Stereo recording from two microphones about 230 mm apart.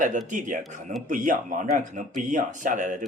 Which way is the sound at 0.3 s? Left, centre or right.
Right.